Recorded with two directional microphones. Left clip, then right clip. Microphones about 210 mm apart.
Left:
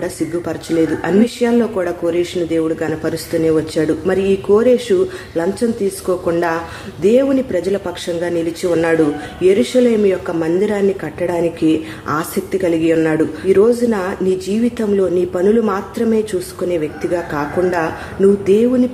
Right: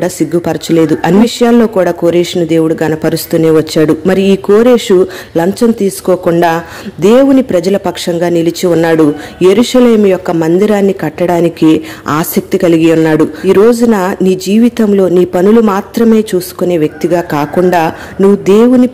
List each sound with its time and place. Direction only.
0.0 s speech: 40° right (ahead or behind)